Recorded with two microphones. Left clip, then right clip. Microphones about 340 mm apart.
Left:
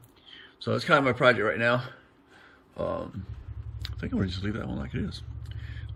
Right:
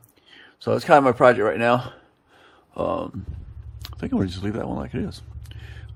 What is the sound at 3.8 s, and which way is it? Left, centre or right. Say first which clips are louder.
Speech: right 6 dB; centre.